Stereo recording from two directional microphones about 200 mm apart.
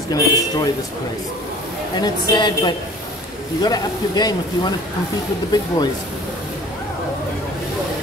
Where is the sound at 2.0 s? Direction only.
20° left (ahead or behind).